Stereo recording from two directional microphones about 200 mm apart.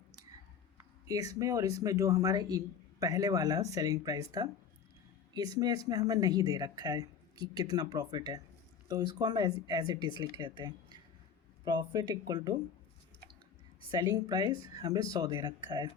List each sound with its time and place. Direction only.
1.0 s a man's voice: 15° right (ahead or behind)
5.5 s speech: 20° right (ahead or behind)
10.6 s a sound: 20° right (ahead or behind)
11.6 s speech: 25° right (ahead or behind)
13.9 s speech: 20° right (ahead or behind)